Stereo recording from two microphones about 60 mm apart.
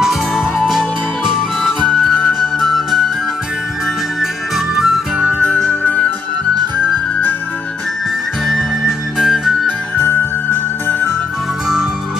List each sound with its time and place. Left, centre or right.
0.0 s music: centre
1.9 s music: left
2.6 s music: centre
4.7 s music: centre
5.4 s music: left
8.5 s music: centre
9.9 s music: left